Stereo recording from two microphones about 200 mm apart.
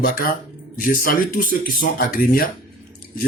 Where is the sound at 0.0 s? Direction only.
45° left (ahead or behind).